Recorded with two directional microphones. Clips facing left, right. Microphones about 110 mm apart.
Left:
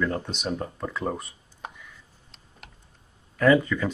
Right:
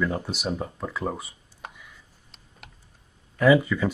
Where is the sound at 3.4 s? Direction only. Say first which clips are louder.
Right 1 dB; 10° right (ahead or behind).